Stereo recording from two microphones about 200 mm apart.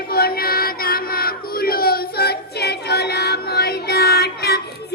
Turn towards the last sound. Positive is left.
turn(degrees=55)  # may be behind; listen again after turning